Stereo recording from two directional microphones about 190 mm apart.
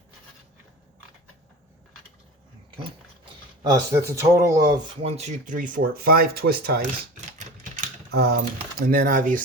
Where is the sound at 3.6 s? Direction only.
15° right (ahead or behind).